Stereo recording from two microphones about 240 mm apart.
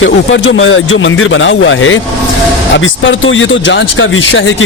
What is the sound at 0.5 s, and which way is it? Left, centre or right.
Speech, left.